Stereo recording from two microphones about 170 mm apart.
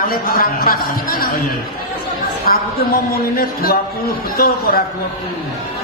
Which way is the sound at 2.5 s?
55° left (ahead or behind).